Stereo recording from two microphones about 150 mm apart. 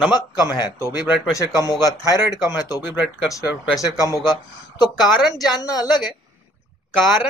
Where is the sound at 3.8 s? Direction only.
20° left (ahead or behind).